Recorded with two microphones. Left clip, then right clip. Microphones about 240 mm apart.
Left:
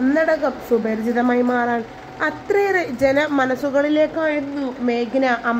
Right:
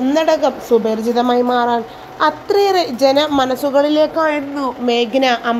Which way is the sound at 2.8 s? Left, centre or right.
Right.